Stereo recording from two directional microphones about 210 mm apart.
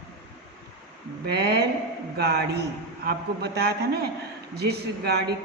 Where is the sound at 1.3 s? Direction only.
50° right (ahead or behind).